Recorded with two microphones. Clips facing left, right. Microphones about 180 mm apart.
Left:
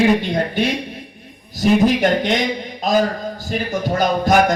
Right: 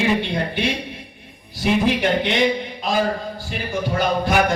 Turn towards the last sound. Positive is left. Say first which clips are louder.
# left 4 dB
turn(degrees=40)  # may be behind; listen again after turning